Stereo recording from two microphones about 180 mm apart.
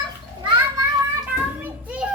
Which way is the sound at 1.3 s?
10° right (ahead or behind).